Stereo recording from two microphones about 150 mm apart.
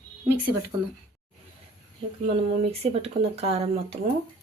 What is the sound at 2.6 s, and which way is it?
Speech, 45° right (ahead or behind).